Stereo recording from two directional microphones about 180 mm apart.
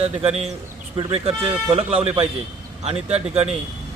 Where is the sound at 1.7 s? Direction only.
30° right (ahead or behind).